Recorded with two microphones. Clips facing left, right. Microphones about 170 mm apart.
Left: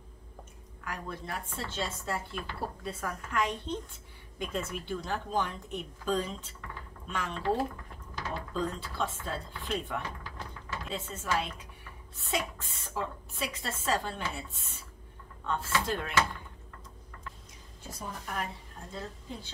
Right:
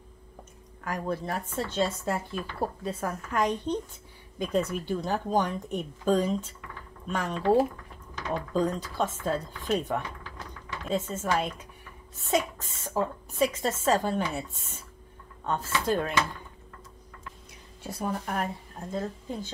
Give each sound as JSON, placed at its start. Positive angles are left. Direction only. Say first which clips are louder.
{"t": 0.8, "sound": "a woman's voice", "louder": "right 8 dB", "side_deg": -40}
{"t": 8.5, "sound": "a woman's voice", "louder": "right 6 dB", "side_deg": -40}
{"t": 18.2, "sound": "a woman's voice", "louder": "right 6 dB", "side_deg": -45}